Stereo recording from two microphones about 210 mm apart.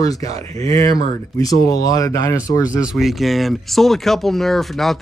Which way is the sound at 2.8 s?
Centre (ahead or behind).